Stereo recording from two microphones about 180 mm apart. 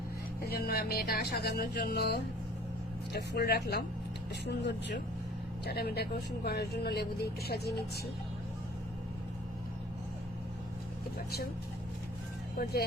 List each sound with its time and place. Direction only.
0.5 s speech: 55° left (ahead or behind)
4.4 s speech: 70° left (ahead or behind)
5.6 s speech: 60° left (ahead or behind)